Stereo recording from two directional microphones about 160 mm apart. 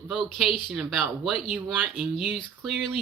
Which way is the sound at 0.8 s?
5° right (ahead or behind).